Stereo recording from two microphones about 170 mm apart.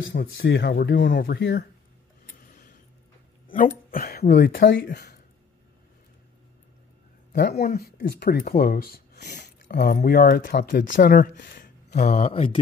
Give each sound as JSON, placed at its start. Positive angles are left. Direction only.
{"t": 0.0, "sound": "speech", "side_deg": 70}
{"t": 3.5, "sound": "speech", "side_deg": 55}
{"t": 7.3, "sound": "speech", "side_deg": 65}
{"t": 9.7, "sound": "speech", "side_deg": 70}